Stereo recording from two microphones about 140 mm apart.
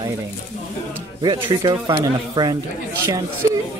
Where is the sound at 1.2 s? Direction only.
35° right (ahead or behind).